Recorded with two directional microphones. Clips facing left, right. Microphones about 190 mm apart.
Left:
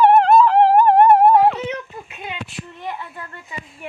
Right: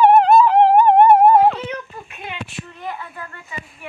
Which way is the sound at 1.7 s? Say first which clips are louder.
Left 1 dB; 20° left (ahead or behind).